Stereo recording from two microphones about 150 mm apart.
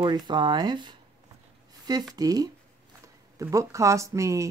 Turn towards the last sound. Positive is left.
turn(degrees=-20)  # may be behind; listen again after turning